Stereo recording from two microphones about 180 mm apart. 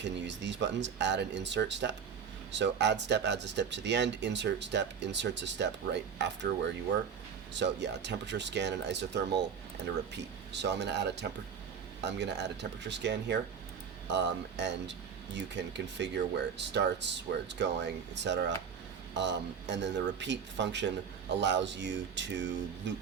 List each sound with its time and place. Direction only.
0.0 s speech: 80° right
7.5 s speech: 75° right (ahead or behind)